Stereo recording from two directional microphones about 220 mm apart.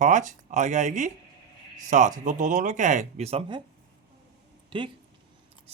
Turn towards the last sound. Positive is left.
turn(degrees=-20)  # may be behind; listen again after turning